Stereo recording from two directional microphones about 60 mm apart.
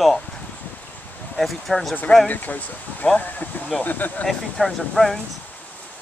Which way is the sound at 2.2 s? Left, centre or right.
Left.